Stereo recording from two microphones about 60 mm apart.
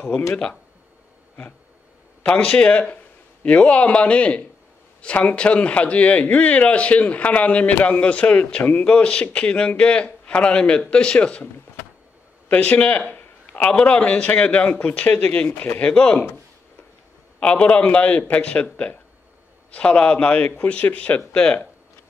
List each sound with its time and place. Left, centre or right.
2.4 s a man's voice: centre
12.4 s a man's voice: left
17.4 s a man's voice: centre